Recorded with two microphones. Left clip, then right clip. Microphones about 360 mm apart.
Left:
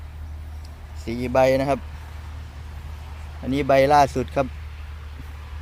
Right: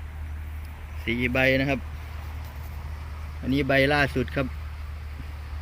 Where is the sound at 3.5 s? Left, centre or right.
Centre.